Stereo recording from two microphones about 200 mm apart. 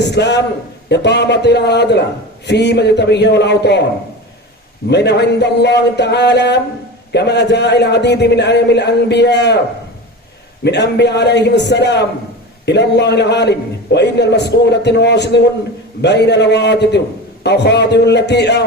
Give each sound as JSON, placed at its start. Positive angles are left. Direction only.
{"t": 0.1, "sound": "a man's voice", "side_deg": 60}
{"t": 4.9, "sound": "a man's voice", "side_deg": 60}
{"t": 10.6, "sound": "a man's voice", "side_deg": 60}